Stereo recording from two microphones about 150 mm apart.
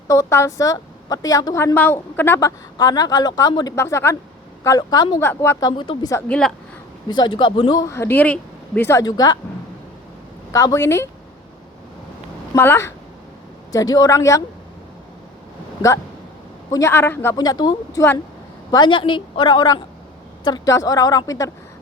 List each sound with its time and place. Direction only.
0.1 s a woman's voice: 20° left (ahead or behind)
2.7 s a woman's voice: 25° left (ahead or behind)
5.2 s a woman's voice: 15° left (ahead or behind); by 6.1 s 35° left (ahead or behind)
6.2 s a man's voice: 5° left (ahead or behind)
7.1 s a woman's voice: 30° left (ahead or behind)
10.5 s a woman's voice: 20° left (ahead or behind)
12.5 s a man's voice: 15° left (ahead or behind)
16.7 s a man's voice: 15° left (ahead or behind)
17.3 s a woman's voice: 25° left (ahead or behind)